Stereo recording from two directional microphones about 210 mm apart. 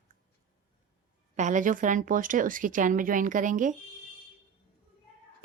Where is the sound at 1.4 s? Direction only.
35° right (ahead or behind).